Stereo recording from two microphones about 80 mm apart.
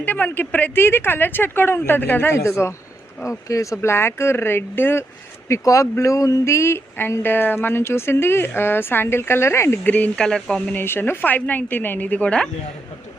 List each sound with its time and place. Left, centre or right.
0.0 s speech: left
5.5 s speech: left
9.8 s speech: left
10.2 s speech: centre
10.8 s speech: left